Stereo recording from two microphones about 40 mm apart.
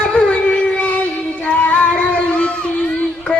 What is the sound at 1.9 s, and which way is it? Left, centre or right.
Music, left.